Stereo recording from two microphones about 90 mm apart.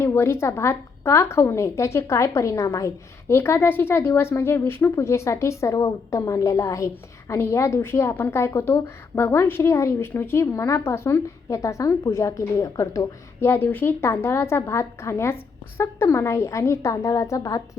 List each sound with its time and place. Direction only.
0.0 s a woman's voice: 30° left (ahead or behind)